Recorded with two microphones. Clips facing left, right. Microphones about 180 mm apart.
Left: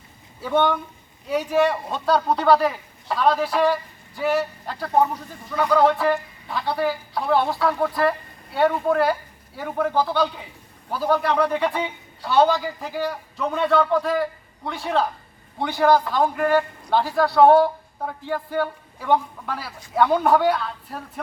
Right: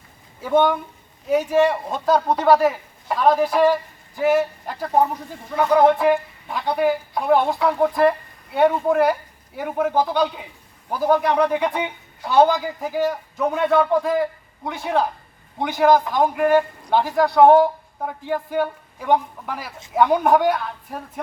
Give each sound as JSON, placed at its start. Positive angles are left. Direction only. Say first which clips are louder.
{"t": 0.4, "sound": "a man's voice", "louder": "right 3 dB", "side_deg": -10}